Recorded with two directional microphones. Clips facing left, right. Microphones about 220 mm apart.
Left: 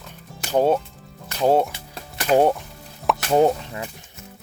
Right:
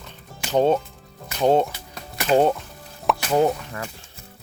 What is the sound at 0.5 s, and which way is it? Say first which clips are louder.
Speech: even; 10° left (ahead or behind).